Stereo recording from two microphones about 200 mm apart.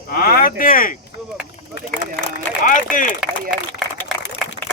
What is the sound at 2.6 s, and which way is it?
Speech, 40° left (ahead or behind).